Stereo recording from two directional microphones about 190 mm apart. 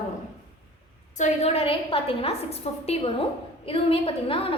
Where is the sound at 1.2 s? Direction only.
35° left (ahead or behind).